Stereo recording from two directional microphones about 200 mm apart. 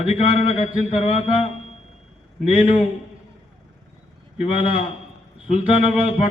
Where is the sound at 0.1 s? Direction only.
35° left (ahead or behind).